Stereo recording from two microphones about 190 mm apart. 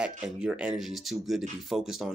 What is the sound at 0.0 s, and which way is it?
Speech, 5° right (ahead or behind).